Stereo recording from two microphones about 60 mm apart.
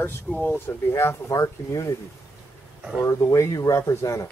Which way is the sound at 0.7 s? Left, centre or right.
Left.